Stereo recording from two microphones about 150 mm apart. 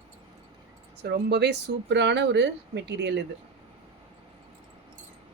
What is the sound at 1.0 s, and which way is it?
Speech, 90° right.